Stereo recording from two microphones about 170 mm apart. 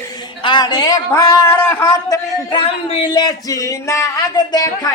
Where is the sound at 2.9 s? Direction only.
30° left (ahead or behind).